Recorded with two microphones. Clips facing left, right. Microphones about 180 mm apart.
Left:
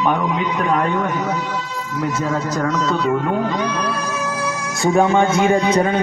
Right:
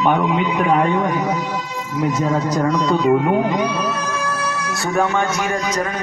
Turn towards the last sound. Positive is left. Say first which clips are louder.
# left 6 dB
turn(degrees=30)  # may be behind; listen again after turning